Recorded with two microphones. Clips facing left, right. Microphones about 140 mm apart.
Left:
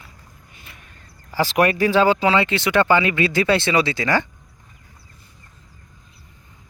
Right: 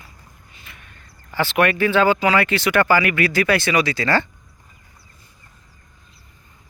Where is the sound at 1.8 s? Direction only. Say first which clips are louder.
Even; 35° left (ahead or behind); by 4.3 s 15° left (ahead or behind).